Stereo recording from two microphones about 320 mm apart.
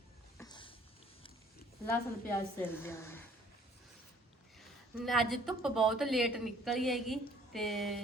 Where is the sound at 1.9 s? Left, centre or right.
Centre.